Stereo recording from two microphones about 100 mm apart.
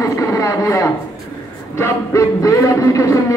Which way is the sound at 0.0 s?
35° left (ahead or behind).